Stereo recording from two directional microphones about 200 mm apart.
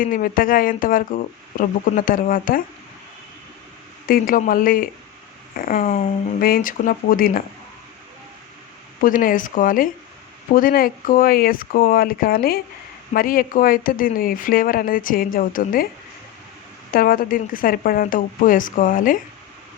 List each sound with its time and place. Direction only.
0.0 s speech: 45° left (ahead or behind)
4.0 s speech: 45° left (ahead or behind)
9.0 s speech: 45° left (ahead or behind)
16.9 s speech: 45° left (ahead or behind)